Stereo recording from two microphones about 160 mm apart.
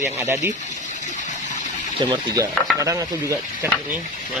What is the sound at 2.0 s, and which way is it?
Stir, 30° right (ahead or behind).